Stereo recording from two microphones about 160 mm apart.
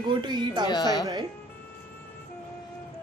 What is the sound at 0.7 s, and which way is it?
Speech, 25° left (ahead or behind).